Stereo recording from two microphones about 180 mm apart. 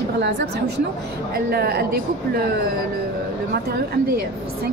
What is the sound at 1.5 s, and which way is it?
Speech, 60° right (ahead or behind).